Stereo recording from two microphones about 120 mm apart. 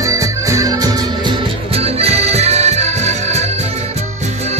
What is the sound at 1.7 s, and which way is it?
Accordion, 55° right (ahead or behind).